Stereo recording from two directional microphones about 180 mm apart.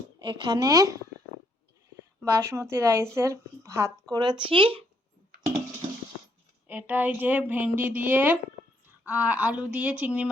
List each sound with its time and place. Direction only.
0.2 s a woman's voice: 25° right (ahead or behind)
2.4 s a woman's voice: 15° right (ahead or behind); by 4.8 s 30° right (ahead or behind)
6.7 s a woman's voice: 10° right (ahead or behind)